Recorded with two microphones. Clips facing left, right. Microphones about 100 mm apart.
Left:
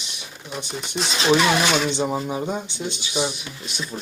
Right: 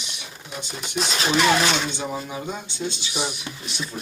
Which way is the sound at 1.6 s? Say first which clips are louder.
Left 3 dB; 25° left (ahead or behind).